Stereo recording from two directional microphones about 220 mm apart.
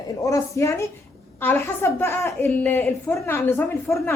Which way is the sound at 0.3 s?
15° left (ahead or behind).